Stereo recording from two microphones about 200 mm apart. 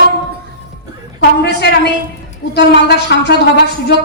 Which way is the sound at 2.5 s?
55° left (ahead or behind).